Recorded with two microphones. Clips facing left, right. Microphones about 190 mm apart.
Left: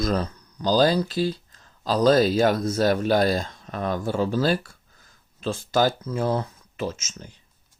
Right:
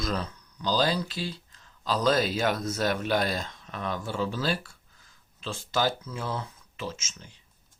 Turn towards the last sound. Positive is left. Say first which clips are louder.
# left 7 dB
turn(degrees=40)  # may be behind; listen again after turning